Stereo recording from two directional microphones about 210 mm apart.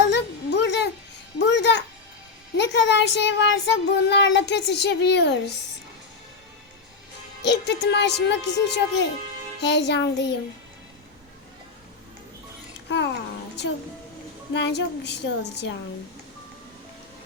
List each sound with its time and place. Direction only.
0.1 s a sound: 55° left (ahead or behind)
2.6 s child singing: 55° left (ahead or behind)
7.4 s child singing: 55° left (ahead or behind)
14.5 s a woman's voice: 55° left (ahead or behind)